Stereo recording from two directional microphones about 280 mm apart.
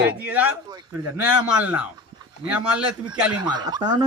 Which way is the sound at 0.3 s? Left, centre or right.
Centre.